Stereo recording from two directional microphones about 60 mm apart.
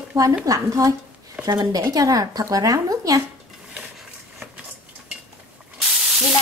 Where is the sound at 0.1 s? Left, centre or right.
Right.